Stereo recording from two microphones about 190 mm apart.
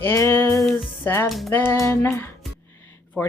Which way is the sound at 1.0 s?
10° left (ahead or behind).